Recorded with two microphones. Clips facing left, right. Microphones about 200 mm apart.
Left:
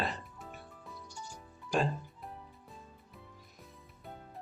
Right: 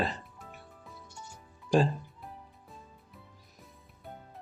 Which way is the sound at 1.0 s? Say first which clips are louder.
Left 3 dB; 25° right (ahead or behind).